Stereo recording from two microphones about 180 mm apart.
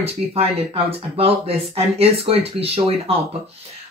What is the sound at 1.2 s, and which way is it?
Speech, 35° right (ahead or behind).